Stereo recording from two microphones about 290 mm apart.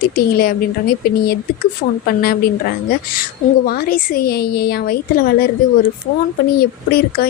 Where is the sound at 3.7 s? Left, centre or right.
Left.